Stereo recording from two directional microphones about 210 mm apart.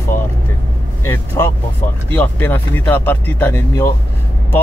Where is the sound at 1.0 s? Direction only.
10° left (ahead or behind).